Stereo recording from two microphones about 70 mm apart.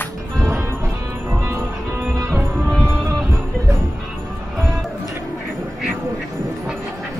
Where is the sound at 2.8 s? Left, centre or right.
Right.